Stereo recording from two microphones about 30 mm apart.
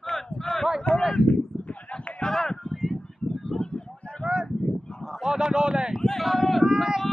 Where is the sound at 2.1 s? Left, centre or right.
Left.